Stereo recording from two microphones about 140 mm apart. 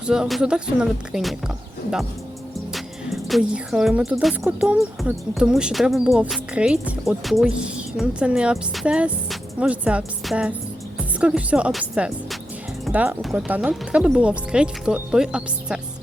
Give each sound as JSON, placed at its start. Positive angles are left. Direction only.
{"t": 0.0, "sound": "speech", "side_deg": -5}
{"t": 3.2, "sound": "speech", "side_deg": 0}